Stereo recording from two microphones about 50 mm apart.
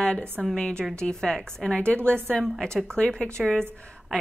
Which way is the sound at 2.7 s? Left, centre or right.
Centre.